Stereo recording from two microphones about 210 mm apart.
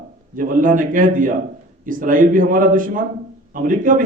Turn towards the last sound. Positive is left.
turn(degrees=-40)  # may be behind; listen again after turning